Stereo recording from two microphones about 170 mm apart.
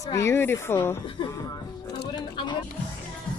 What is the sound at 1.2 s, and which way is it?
Speech, 30° left (ahead or behind).